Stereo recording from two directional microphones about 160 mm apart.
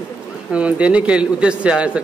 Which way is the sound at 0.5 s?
5° right (ahead or behind).